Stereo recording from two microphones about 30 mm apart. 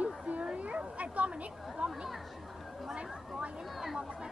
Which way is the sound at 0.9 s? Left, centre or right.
Right.